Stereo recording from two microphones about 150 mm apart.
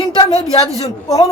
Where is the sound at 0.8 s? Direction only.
20° left (ahead or behind).